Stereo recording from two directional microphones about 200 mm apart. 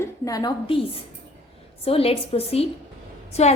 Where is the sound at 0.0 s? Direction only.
15° left (ahead or behind).